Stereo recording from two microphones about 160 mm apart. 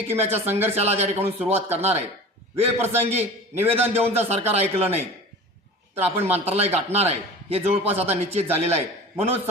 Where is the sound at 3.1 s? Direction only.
40° right (ahead or behind).